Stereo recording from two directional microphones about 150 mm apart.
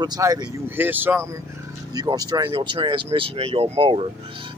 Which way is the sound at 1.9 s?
25° right (ahead or behind).